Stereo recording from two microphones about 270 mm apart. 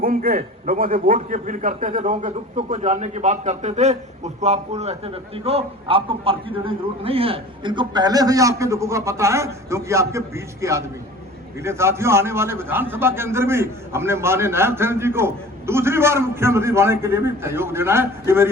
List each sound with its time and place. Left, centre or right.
0.0 s a man's voice: right; by 18.4 s centre